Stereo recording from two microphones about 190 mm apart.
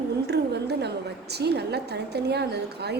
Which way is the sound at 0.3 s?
60° right (ahead or behind).